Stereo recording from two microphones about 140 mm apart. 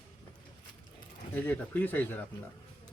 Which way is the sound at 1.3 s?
10° left (ahead or behind).